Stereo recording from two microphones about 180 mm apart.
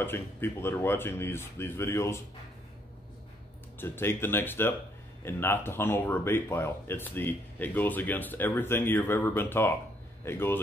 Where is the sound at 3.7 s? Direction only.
10° left (ahead or behind).